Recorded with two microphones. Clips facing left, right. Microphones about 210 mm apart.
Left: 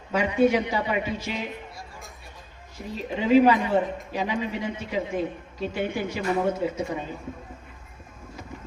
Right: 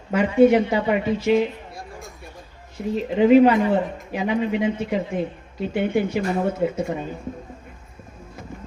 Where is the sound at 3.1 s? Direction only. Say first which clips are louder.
Right 5 dB; 55° right (ahead or behind).